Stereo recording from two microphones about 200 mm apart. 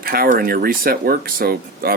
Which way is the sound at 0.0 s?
45° right (ahead or behind).